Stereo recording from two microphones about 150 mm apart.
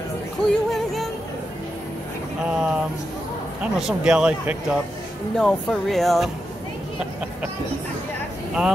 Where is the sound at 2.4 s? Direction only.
5° right (ahead or behind).